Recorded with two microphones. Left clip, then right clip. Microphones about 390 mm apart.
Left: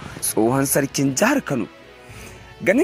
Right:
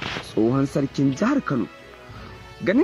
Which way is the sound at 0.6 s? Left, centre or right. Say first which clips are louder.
Left 3 dB; centre.